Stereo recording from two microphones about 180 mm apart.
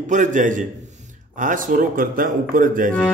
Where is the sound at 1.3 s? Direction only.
45° right (ahead or behind).